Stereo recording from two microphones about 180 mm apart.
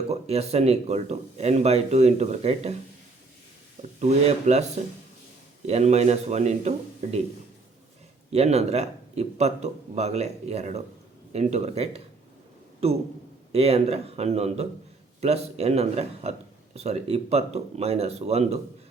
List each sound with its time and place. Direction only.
0.1 s speech: 35° right (ahead or behind)
4.0 s speech: 40° right (ahead or behind)
5.6 s speech: 35° right (ahead or behind)
8.3 s speech: 35° right (ahead or behind)